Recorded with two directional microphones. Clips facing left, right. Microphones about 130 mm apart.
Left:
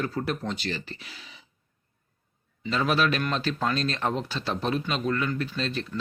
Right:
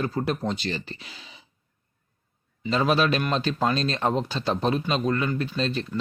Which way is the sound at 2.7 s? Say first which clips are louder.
Right 3 dB; 25° right (ahead or behind).